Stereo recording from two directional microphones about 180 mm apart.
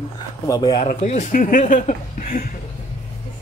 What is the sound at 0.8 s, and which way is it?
A man's voice, 40° left (ahead or behind).